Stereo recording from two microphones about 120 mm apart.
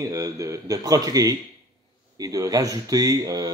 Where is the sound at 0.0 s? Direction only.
25° right (ahead or behind).